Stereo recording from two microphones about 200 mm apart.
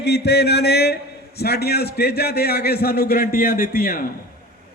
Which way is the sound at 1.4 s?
50° left (ahead or behind).